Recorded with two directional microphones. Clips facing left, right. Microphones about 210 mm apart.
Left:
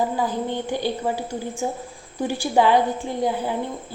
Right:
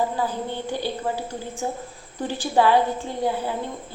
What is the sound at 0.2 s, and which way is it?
A woman's voice, 15° left (ahead or behind).